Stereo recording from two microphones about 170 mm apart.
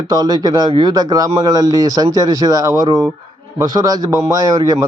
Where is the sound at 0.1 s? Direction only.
25° right (ahead or behind).